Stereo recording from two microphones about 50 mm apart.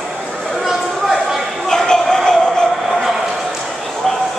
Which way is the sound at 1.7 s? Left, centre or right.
Centre.